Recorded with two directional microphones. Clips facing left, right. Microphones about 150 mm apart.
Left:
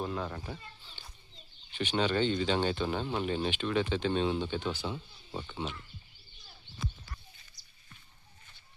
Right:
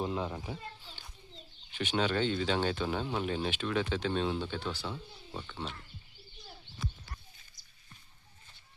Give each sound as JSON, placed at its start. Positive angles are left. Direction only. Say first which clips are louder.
{"t": 0.0, "sound": "speech", "louder": "right 1 dB", "side_deg": -20}
{"t": 1.7, "sound": "speech", "louder": "left 1 dB", "side_deg": -5}
{"t": 5.3, "sound": "speech", "louder": "left 3 dB", "side_deg": 10}